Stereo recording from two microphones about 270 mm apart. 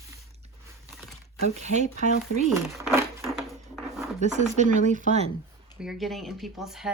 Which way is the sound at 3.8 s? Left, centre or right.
Centre.